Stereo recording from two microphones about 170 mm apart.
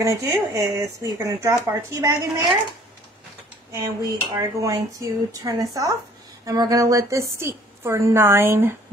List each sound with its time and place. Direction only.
0.0 s speech: 20° right (ahead or behind)
3.7 s speech: 20° right (ahead or behind)